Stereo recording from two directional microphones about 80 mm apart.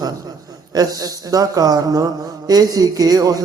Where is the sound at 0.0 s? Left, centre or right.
Right.